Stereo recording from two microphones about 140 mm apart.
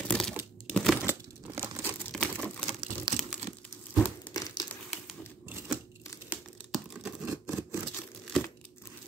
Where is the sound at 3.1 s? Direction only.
35° right (ahead or behind).